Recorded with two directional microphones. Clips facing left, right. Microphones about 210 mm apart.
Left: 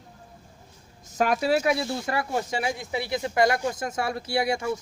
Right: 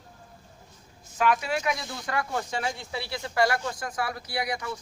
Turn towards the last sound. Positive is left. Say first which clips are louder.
# left 6 dB
turn(degrees=25)  # may be behind; listen again after turning